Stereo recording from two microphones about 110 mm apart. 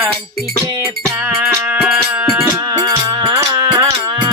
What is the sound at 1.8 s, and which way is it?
Music, 5° right (ahead or behind).